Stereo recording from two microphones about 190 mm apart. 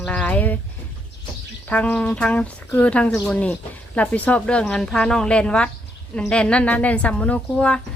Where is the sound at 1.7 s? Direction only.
5° left (ahead or behind).